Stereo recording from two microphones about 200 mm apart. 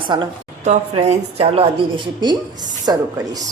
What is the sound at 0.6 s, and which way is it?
A woman's voice, 35° right (ahead or behind).